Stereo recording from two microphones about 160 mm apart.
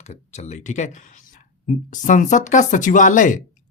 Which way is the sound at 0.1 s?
45° left (ahead or behind).